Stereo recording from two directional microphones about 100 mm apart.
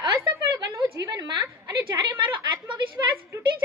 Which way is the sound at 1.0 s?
40° right (ahead or behind).